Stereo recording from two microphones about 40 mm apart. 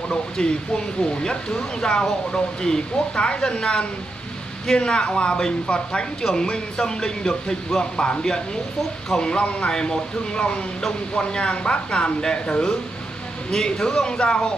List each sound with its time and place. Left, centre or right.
0.1 s a man's voice: left
14.1 s speech: left